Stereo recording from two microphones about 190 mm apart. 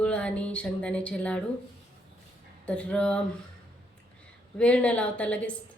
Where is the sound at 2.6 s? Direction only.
5° left (ahead or behind).